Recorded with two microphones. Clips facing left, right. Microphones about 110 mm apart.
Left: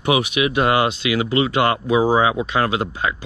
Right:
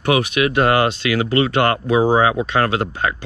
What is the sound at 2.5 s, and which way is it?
Speech, 45° right (ahead or behind).